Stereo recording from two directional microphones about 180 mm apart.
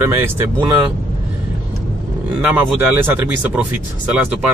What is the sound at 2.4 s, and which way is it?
Speech, 10° right (ahead or behind).